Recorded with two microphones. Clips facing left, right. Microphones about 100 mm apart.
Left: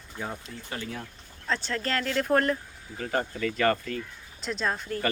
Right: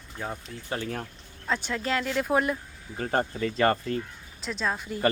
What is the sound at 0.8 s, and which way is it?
Speech, 45° right (ahead or behind).